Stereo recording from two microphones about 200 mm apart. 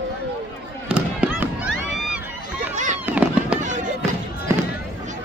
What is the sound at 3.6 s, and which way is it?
Fireworks, 40° right (ahead or behind).